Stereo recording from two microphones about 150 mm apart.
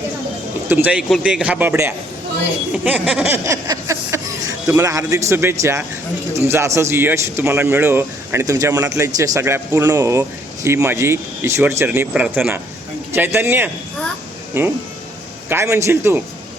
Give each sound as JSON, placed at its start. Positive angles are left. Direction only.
{"t": 0.7, "sound": "a man's voice", "side_deg": -10}
{"t": 2.7, "sound": "music", "side_deg": -10}
{"t": 6.5, "sound": "a man's voice", "side_deg": -20}